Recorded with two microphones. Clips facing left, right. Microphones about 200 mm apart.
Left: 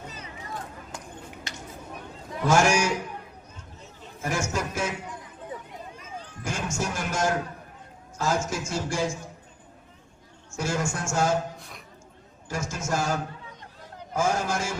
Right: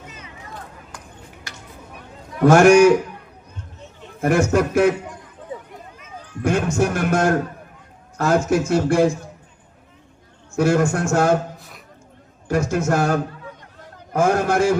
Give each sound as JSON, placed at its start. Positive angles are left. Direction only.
{"t": 2.4, "sound": "a man's voice", "side_deg": -60}
{"t": 4.2, "sound": "a man's voice", "side_deg": -60}
{"t": 6.4, "sound": "a man's voice", "side_deg": -60}
{"t": 10.5, "sound": "a man's voice", "side_deg": -60}
{"t": 12.5, "sound": "a man's voice", "side_deg": -60}